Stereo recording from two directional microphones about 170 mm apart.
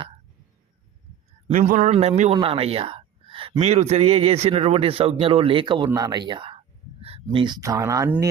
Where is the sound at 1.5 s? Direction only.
50° right (ahead or behind).